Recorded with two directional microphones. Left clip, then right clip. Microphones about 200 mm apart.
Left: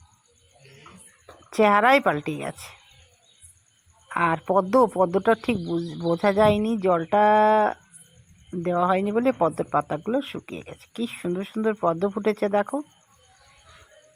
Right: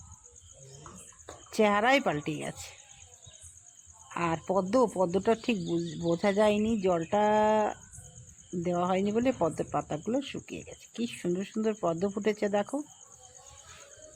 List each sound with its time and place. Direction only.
1.5 s speech: 20° left (ahead or behind)
4.1 s speech: 15° left (ahead or behind)